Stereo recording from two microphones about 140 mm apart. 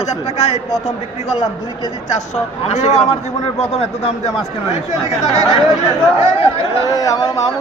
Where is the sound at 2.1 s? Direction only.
50° left (ahead or behind).